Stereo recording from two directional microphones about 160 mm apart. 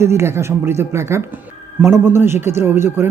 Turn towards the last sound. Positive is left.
turn(degrees=-15)  # may be behind; listen again after turning